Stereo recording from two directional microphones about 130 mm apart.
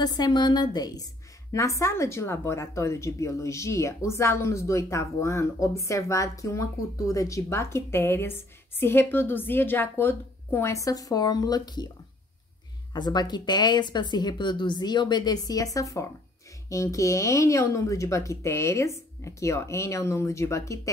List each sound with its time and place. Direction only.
0.0 s speech: 30° left (ahead or behind)
12.9 s speech: 35° left (ahead or behind)